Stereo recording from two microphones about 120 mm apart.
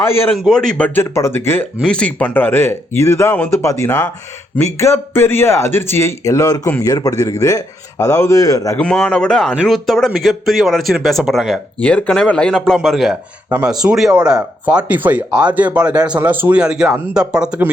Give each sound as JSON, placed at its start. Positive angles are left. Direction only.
{"t": 0.0, "sound": "a man's voice", "side_deg": 20}
{"t": 0.3, "sound": "speech", "side_deg": 0}
{"t": 0.9, "sound": "speech", "side_deg": 20}
{"t": 1.8, "sound": "speech", "side_deg": 10}
{"t": 8.8, "sound": "speech", "side_deg": 10}
{"t": 11.8, "sound": "speech", "side_deg": 10}